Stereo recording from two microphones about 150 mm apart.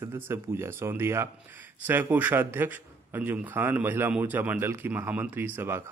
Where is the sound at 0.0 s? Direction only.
15° right (ahead or behind).